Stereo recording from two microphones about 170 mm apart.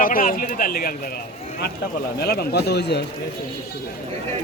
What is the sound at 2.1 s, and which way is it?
Speech, 70° left (ahead or behind).